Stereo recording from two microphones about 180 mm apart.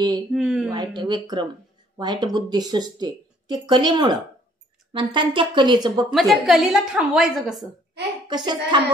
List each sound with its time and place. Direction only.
0.3 s a sound: centre (ahead or behind)
0.7 s speech: 20° right (ahead or behind)
6.1 s a woman's voice: centre (ahead or behind)
8.3 s speech: 25° right (ahead or behind)